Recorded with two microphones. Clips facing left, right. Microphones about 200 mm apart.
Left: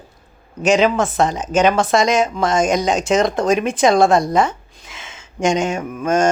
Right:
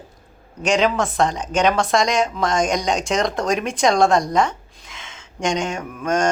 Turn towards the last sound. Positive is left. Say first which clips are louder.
# left 4 dB
turn(degrees=5)  # may be behind; listen again after turning